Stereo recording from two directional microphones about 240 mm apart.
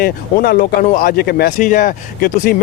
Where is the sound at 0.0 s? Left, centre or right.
Left.